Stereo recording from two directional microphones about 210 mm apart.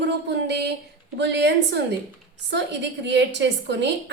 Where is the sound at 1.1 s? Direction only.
55° right (ahead or behind).